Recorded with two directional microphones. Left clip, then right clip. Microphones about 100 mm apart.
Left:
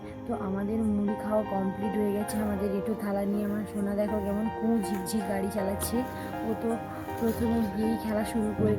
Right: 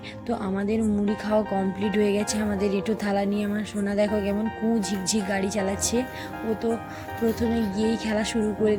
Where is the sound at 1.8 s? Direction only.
25° right (ahead or behind).